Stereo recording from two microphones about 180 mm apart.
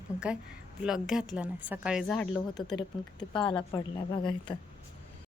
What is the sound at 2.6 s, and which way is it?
Speech, 25° left (ahead or behind).